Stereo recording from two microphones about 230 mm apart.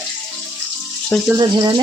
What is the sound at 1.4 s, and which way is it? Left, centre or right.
Speech, centre.